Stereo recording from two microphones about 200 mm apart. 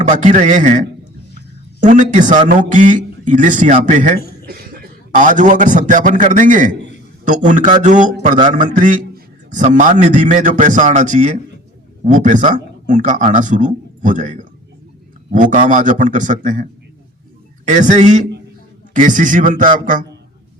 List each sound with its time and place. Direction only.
0.0 s a man's voice: 35° right (ahead or behind)
4.4 s a man's voice: 50° right (ahead or behind)
17.7 s a man's voice: 35° right (ahead or behind)